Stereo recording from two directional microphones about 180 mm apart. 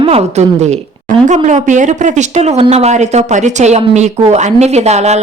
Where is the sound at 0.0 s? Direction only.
35° right (ahead or behind).